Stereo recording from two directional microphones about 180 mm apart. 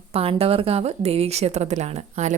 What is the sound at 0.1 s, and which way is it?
A woman's voice, 35° right (ahead or behind).